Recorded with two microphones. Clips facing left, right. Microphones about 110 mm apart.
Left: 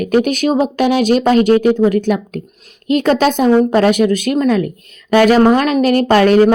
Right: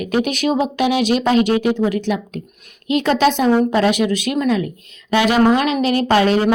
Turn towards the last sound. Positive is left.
turn(degrees=50)  # may be behind; listen again after turning